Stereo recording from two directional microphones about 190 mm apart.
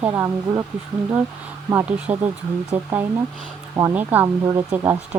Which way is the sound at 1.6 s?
15° right (ahead or behind).